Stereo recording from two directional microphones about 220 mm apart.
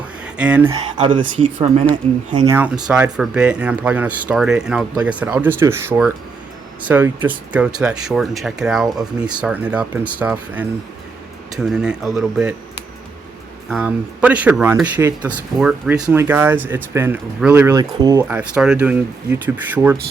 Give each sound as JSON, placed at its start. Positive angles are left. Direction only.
{"t": 0.3, "sound": "speech", "side_deg": -5}
{"t": 0.9, "sound": "speech", "side_deg": -20}
{"t": 2.5, "sound": "speech", "side_deg": -5}
{"t": 13.7, "sound": "speech", "side_deg": -5}